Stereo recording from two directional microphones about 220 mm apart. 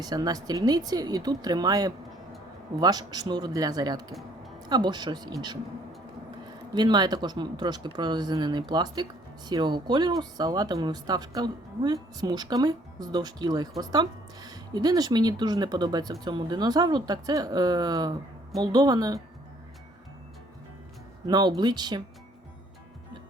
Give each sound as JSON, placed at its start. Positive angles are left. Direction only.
{"t": 0.0, "sound": "speech", "side_deg": -20}
{"t": 6.7, "sound": "speech", "side_deg": -20}
{"t": 21.2, "sound": "speech", "side_deg": -20}